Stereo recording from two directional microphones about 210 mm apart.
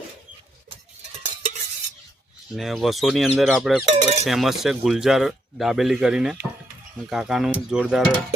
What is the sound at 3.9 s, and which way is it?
Speech, 30° right (ahead or behind).